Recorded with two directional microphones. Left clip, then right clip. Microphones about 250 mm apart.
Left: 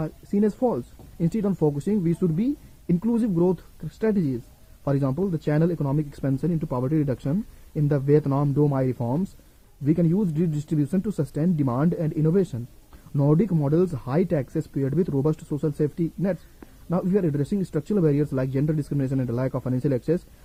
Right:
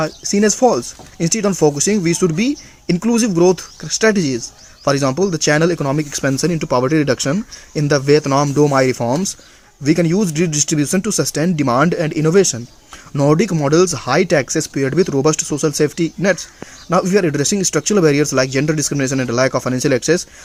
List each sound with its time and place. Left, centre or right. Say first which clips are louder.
0.3 s speech: right 10 dB; centre
5.1 s speech: right 10 dB; right
5.5 s speech: right 10 dB; centre
9.8 s speech: right 9 dB; centre
13.7 s speech: right 12 dB; right
14.1 s speech: right 11 dB; centre; by 15.7 s right
15.8 s speech: right 10 dB; centre